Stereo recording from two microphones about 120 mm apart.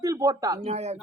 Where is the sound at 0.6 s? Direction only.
65° right (ahead or behind).